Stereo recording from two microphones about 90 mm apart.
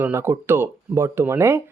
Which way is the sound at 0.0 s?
25° right (ahead or behind).